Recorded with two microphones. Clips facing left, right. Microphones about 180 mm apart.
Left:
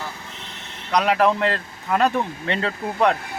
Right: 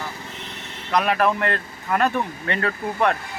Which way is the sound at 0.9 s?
20° left (ahead or behind).